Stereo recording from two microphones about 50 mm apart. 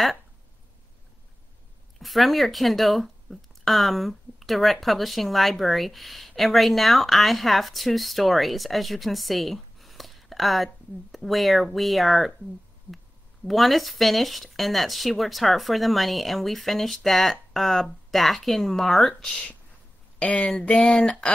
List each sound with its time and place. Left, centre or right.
2.0 s speech: centre
13.5 s speech: centre
19.2 s speech: centre
20.2 s speech: left